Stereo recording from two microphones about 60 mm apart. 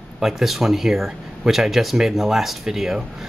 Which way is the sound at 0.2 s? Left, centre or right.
Centre.